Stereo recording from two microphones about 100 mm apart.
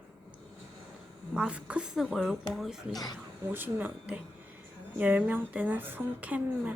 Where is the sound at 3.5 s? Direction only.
20° right (ahead or behind).